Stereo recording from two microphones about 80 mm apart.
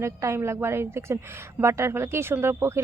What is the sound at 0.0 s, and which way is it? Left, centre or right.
A woman's voice, right.